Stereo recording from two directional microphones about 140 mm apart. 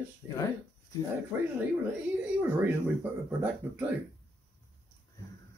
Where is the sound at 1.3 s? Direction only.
20° right (ahead or behind).